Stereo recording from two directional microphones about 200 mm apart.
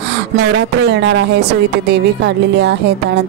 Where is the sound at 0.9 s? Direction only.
65° right (ahead or behind).